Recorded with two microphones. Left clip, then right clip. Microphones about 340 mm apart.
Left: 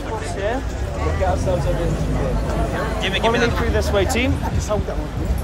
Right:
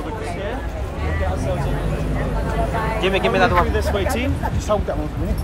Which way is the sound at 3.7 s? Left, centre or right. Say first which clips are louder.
Left 2 dB; centre.